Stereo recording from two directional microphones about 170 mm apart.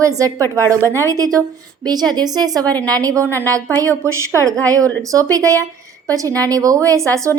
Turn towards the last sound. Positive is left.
turn(degrees=-20)  # may be behind; listen again after turning